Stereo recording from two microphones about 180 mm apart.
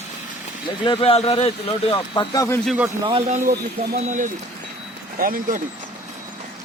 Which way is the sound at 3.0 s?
30° right (ahead or behind).